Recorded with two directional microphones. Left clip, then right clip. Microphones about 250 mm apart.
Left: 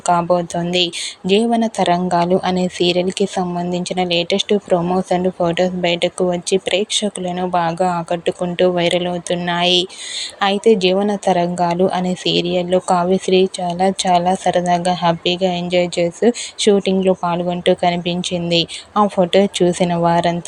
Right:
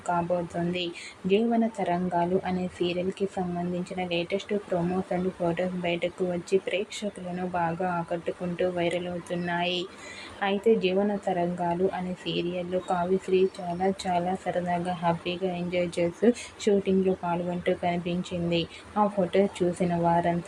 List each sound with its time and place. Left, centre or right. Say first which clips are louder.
1.3 s speech: left 9 dB; left